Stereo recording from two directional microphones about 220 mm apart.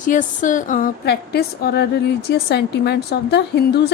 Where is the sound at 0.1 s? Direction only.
35° left (ahead or behind).